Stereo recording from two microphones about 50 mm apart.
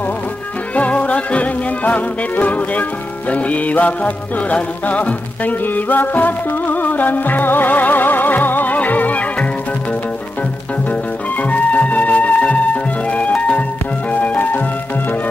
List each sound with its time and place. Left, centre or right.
0.7 s music: left
10.9 s music: left